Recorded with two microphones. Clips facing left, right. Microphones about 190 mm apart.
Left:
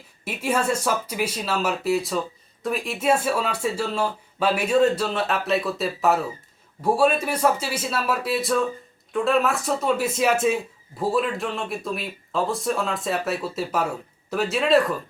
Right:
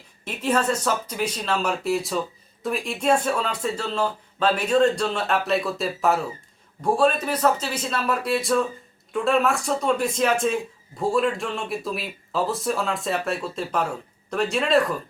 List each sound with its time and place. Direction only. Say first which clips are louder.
0.3 s speech: right 1 dB; 10° left (ahead or behind)